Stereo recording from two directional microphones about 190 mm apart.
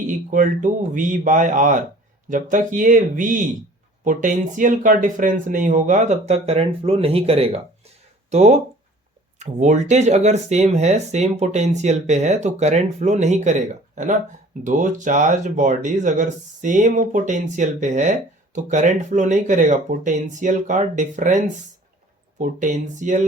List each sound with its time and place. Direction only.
0.1 s speech: 40° right (ahead or behind)